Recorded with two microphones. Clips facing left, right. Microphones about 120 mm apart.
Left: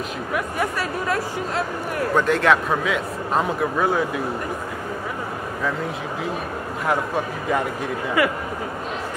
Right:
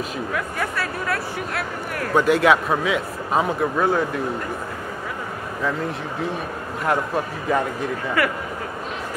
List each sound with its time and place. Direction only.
0.3 s speech: 20° left (ahead or behind)
2.1 s a man's voice: 5° right (ahead or behind)
6.9 s a man's voice: centre (ahead or behind)
8.2 s speech: 15° left (ahead or behind)